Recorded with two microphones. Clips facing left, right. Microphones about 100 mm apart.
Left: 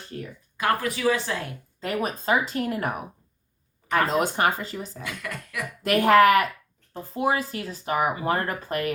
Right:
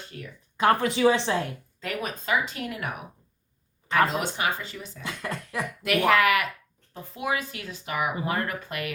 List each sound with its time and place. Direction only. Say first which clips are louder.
0.1 s speech: left 7 dB; 35° left (ahead or behind)
0.5 s a woman's voice: right 3 dB; 25° right (ahead or behind)
1.8 s speech: left 5 dB; 35° left (ahead or behind)
4.1 s speech: left 5 dB; 45° left (ahead or behind)
5.0 s a woman's voice: right 1 dB; 30° right (ahead or behind)
5.8 s speech: left 5 dB; 40° left (ahead or behind)